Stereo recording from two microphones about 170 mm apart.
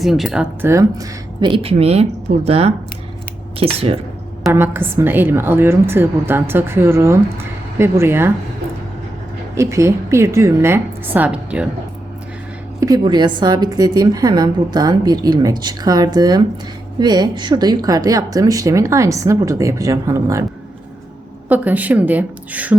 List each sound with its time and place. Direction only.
0.0 s speech: centre (ahead or behind)
0.6 s speech: 20° right (ahead or behind); by 3.9 s 35° right (ahead or behind)
4.5 s a woman's voice: 15° right (ahead or behind)
9.6 s a woman's voice: 15° right (ahead or behind)
12.8 s a woman's voice: 25° right (ahead or behind)
21.5 s a woman's voice: 10° right (ahead or behind)